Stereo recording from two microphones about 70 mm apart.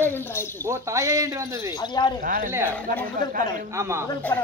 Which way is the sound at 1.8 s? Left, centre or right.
Left.